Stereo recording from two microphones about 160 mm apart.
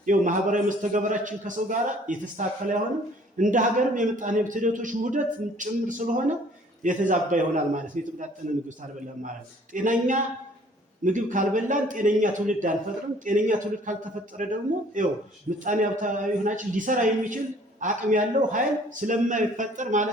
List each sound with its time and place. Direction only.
0.0 s a man's voice: 55° right (ahead or behind)
9.7 s a man's voice: 55° right (ahead or behind)